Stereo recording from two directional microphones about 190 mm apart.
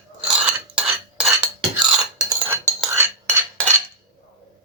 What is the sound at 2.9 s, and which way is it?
Cutlery, 15° right (ahead or behind).